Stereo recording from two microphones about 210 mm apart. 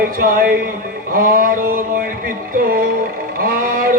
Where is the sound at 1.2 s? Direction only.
40° right (ahead or behind).